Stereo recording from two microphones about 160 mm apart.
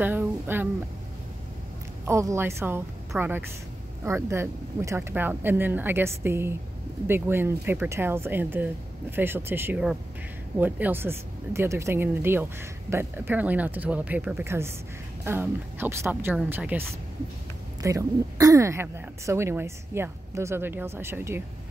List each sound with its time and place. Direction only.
0.0 s a sound: 10° right (ahead or behind)
2.0 s speech: 15° right (ahead or behind)
17.8 s speech: 20° right (ahead or behind)